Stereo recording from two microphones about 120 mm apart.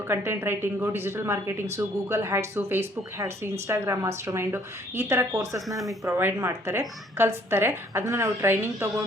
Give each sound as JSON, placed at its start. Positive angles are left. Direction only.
{"t": 0.1, "sound": "a woman's voice", "side_deg": -20}